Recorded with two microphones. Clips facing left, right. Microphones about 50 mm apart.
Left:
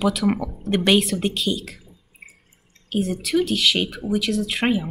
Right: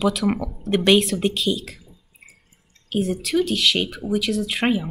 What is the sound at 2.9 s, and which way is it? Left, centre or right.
Speech, centre.